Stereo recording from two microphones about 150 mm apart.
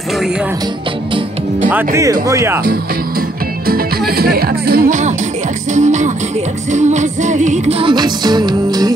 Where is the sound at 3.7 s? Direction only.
90° right; by 5.1 s 65° right (ahead or behind).